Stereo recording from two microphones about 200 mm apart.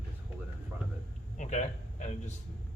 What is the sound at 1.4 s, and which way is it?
Speech, 35° left (ahead or behind).